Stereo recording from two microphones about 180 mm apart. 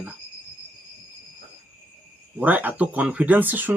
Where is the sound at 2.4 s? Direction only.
10° right (ahead or behind).